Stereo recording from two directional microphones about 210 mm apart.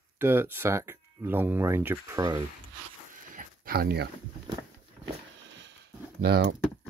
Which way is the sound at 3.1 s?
40° right (ahead or behind).